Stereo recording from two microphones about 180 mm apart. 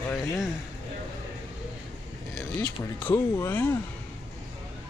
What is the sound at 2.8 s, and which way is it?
Speech, 15° left (ahead or behind).